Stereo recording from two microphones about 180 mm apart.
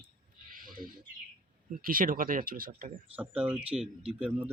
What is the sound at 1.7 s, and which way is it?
Speech, 50° right (ahead or behind).